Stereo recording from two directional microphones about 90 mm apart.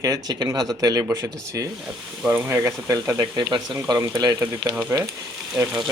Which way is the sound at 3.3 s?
55° right (ahead or behind).